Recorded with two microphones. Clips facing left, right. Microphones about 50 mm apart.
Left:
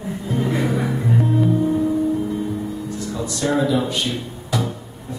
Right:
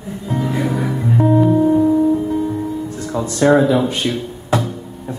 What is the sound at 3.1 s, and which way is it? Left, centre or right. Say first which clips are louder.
Speech: right 8 dB; right.